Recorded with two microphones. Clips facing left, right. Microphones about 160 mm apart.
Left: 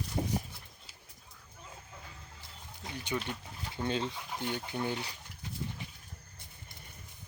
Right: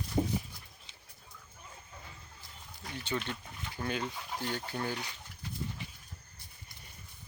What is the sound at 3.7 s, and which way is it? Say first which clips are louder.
Speech: left 2 dB; 25° left (ahead or behind).